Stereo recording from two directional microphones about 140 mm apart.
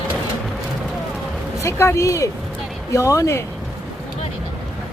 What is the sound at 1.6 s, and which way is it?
Speech, 20° left (ahead or behind).